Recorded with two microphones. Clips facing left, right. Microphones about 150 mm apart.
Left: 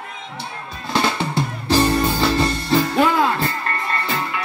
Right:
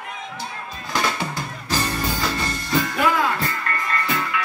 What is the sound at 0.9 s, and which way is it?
Drum, 30° left (ahead or behind).